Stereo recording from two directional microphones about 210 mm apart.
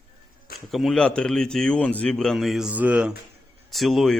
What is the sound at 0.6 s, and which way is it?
Speech, centre (ahead or behind).